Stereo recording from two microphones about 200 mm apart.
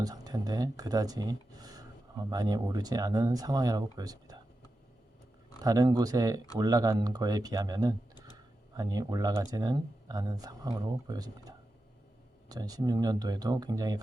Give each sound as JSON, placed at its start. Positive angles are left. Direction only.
{"t": 0.0, "sound": "speech", "side_deg": -20}
{"t": 5.6, "sound": "speech", "side_deg": -15}